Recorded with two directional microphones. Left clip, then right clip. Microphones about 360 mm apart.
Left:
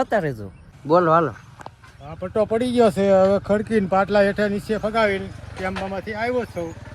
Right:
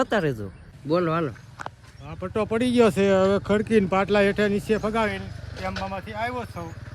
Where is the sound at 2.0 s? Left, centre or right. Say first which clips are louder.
Left 5 dB; centre.